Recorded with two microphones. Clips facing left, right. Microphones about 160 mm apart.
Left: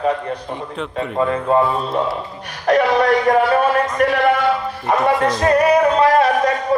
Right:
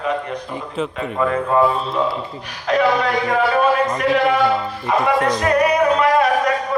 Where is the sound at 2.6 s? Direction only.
50° left (ahead or behind).